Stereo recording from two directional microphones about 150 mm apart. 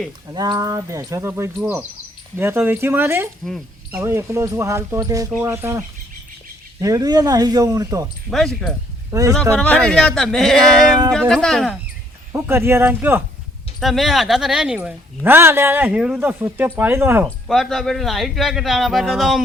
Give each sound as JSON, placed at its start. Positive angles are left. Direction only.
{"t": 0.3, "sound": "speech", "side_deg": -25}
{"t": 8.0, "sound": "speech", "side_deg": 0}
{"t": 9.1, "sound": "speech", "side_deg": -20}
{"t": 9.6, "sound": "speech", "side_deg": 5}
{"t": 12.3, "sound": "speech", "side_deg": -15}
{"t": 13.7, "sound": "speech", "side_deg": 0}
{"t": 17.2, "sound": "speech", "side_deg": 0}